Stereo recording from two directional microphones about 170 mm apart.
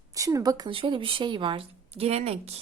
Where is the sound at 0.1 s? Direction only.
20° right (ahead or behind).